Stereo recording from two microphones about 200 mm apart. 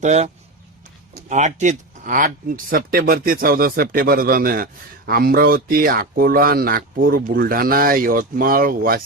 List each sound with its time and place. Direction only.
0.0 s speech: 35° right (ahead or behind)
1.3 s speech: 35° right (ahead or behind)